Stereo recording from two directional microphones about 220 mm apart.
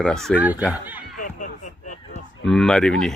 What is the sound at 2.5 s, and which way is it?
Speech, centre (ahead or behind).